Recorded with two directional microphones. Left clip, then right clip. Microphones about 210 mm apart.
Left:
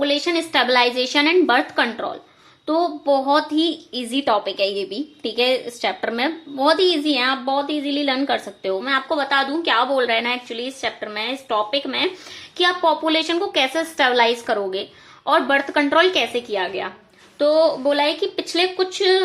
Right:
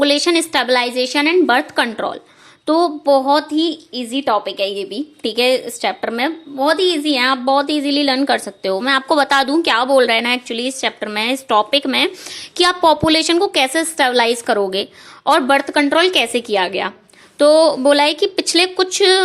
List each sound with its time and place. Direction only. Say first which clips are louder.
0.0 s a woman's voice: right 6 dB; 40° right (ahead or behind)